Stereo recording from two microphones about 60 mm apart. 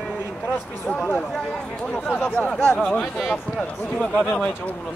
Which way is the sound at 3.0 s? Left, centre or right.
Centre.